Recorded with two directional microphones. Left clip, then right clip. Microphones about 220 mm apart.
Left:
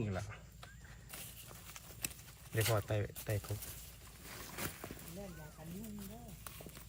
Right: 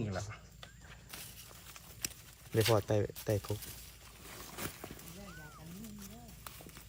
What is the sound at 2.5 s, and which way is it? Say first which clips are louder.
Speech: right 6 dB; 15° right (ahead or behind).